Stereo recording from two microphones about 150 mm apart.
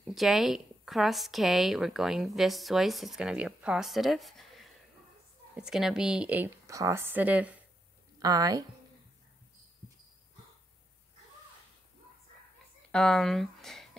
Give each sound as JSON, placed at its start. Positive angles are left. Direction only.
{"t": 0.0, "sound": "speech", "side_deg": 0}
{"t": 8.2, "sound": "a woman's voice", "side_deg": -25}
{"t": 12.9, "sound": "speech", "side_deg": 5}